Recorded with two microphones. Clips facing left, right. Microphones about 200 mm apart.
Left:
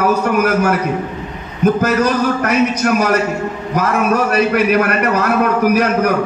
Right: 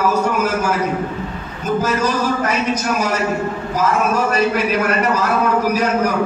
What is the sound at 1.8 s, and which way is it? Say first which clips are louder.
Speech: left 4 dB; 65° left (ahead or behind).